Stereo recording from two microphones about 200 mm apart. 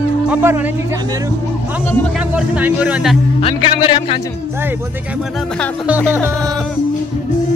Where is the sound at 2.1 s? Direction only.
5° right (ahead or behind).